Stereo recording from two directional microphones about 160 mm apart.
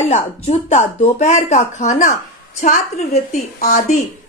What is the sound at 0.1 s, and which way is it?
A woman's voice, 45° left (ahead or behind).